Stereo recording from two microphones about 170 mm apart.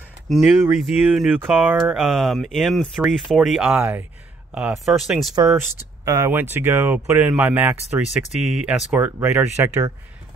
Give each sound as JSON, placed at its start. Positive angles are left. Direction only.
{"t": 0.3, "sound": "speech", "side_deg": 0}
{"t": 5.3, "sound": "speech", "side_deg": -25}